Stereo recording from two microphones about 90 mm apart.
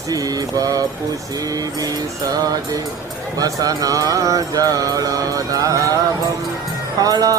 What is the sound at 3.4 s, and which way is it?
Mantra, 45° right (ahead or behind).